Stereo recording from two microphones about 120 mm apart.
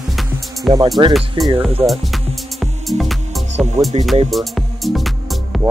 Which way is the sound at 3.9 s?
60° right (ahead or behind).